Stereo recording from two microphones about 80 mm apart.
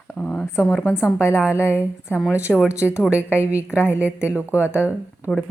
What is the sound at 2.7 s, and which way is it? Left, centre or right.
A woman's voice, left.